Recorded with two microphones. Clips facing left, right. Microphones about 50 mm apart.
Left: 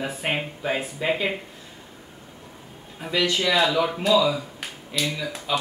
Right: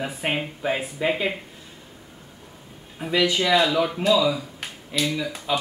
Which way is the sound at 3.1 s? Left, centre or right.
Centre.